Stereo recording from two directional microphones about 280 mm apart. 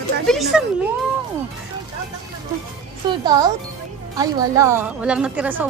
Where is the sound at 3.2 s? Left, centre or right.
Centre.